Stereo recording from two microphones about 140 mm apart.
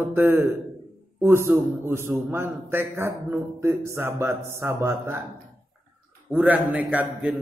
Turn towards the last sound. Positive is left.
turn(degrees=-10)  # may be behind; listen again after turning